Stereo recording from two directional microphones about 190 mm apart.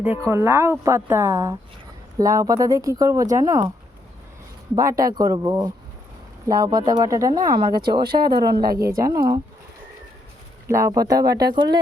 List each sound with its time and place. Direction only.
0.0 s a woman's voice: 10° right (ahead or behind)
4.7 s speech: 15° right (ahead or behind)
8.0 s speech: 55° right (ahead or behind)
8.5 s a woman's voice: 20° right (ahead or behind)
10.7 s speech: 15° right (ahead or behind)